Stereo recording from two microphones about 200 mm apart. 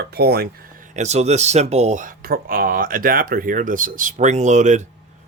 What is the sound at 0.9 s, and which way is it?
Speech, 35° right (ahead or behind).